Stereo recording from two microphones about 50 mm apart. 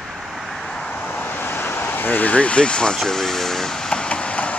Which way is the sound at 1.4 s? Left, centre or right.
Left.